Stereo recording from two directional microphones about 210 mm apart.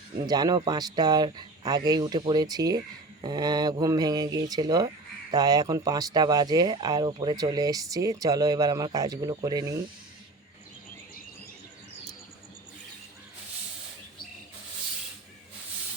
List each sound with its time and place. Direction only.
0.3 s speech: 20° right (ahead or behind)